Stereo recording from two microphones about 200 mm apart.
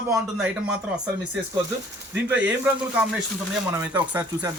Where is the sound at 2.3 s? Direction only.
5° right (ahead or behind).